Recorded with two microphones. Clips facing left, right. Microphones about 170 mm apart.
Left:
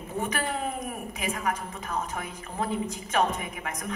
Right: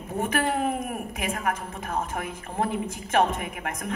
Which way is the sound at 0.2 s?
50° right (ahead or behind).